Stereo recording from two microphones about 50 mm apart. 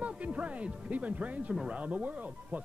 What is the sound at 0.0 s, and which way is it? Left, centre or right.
Speech, right.